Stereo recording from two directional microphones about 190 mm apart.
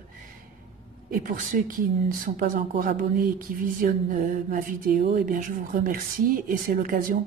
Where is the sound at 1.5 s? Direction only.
45° right (ahead or behind).